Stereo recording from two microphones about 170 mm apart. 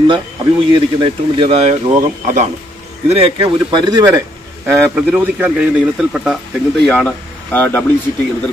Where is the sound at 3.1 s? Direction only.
30° right (ahead or behind).